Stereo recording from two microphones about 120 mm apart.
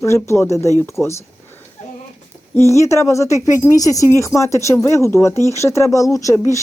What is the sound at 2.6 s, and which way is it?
Speech, 25° left (ahead or behind).